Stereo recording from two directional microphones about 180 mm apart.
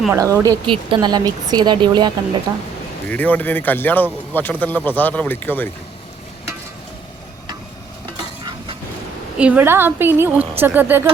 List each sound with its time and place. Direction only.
0.1 s speech: 20° right (ahead or behind)
3.1 s speech: 10° left (ahead or behind)
9.4 s a woman's voice: 10° right (ahead or behind)